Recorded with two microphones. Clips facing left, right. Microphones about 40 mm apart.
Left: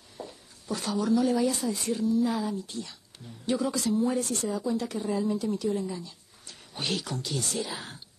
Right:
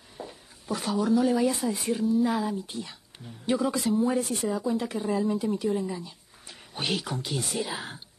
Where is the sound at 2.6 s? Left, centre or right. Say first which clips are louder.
Right 1 dB; centre.